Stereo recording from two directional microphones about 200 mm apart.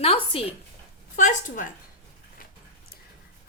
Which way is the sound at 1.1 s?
40° left (ahead or behind).